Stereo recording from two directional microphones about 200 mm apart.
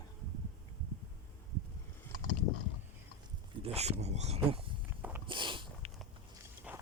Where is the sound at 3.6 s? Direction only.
30° right (ahead or behind).